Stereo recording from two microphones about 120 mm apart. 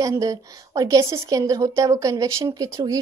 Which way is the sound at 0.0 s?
30° right (ahead or behind).